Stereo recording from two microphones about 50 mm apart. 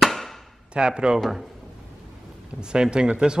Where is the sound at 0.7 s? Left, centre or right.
Centre.